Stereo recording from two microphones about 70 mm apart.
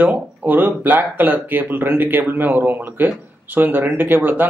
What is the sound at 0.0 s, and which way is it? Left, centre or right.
A man's voice, right.